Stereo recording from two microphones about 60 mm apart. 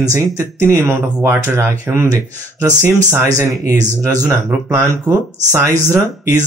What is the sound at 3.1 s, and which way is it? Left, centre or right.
Speech, right.